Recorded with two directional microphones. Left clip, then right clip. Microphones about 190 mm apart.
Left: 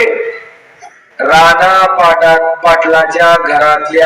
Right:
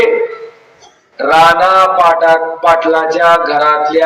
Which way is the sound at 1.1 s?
20° left (ahead or behind).